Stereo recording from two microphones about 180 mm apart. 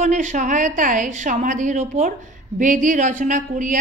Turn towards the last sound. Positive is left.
turn(degrees=-45)  # may be behind; listen again after turning